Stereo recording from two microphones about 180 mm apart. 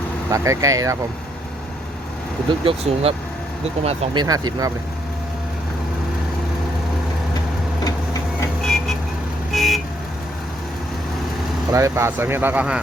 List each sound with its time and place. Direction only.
0.3 s speech: 15° right (ahead or behind)
2.6 s speech: 30° right (ahead or behind)
8.6 s vehicle: centre (ahead or behind)
11.7 s speech: 15° right (ahead or behind)